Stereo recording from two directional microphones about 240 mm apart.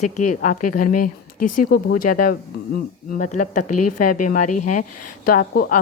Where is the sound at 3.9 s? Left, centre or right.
Left.